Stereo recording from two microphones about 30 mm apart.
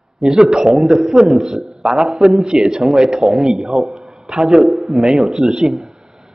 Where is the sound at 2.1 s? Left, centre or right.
Centre.